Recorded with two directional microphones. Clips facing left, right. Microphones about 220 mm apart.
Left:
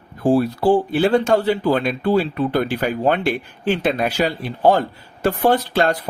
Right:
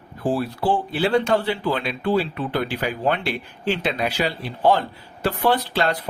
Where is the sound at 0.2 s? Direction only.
45° left (ahead or behind).